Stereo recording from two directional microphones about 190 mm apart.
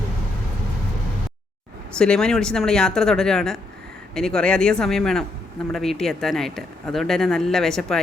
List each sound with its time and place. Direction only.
2.0 s speech: 5° left (ahead or behind)